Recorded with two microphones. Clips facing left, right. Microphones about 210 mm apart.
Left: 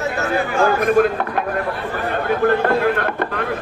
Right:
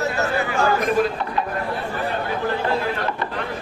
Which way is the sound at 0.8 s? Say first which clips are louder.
Left 5 dB; 55° left (ahead or behind).